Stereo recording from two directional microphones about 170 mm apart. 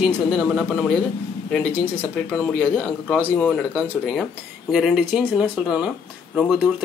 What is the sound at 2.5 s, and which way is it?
Speech, 5° left (ahead or behind).